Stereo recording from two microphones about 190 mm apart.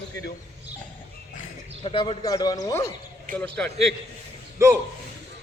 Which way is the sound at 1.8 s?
25° left (ahead or behind).